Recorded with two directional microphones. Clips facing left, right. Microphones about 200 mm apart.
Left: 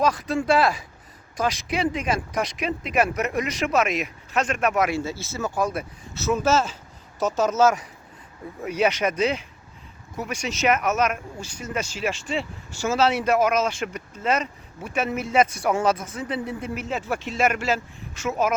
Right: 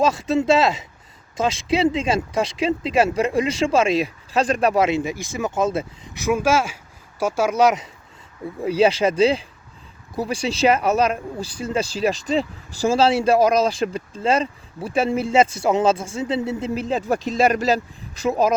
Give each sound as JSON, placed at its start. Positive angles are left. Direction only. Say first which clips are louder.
{"t": 0.0, "sound": "speech", "louder": "right 4 dB", "side_deg": -25}
{"t": 4.9, "sound": "speech", "louder": "right 4 dB", "side_deg": -15}
{"t": 6.2, "sound": "speech", "louder": "right 2 dB", "side_deg": -10}
{"t": 8.6, "sound": "speech", "louder": "right 5 dB", "side_deg": -30}